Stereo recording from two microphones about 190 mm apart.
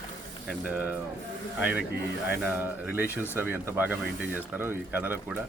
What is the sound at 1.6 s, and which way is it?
Speech, 5° right (ahead or behind).